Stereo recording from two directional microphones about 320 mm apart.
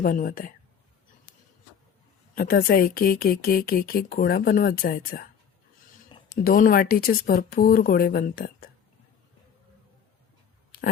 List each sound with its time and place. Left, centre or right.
0.0 s speech: left
2.3 s speech: left